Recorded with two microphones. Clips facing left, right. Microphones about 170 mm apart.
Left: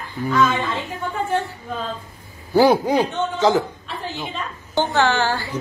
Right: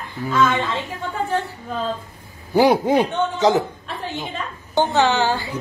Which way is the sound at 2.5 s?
20° right (ahead or behind).